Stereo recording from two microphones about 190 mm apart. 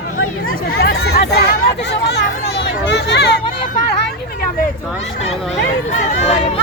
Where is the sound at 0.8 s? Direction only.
55° left (ahead or behind).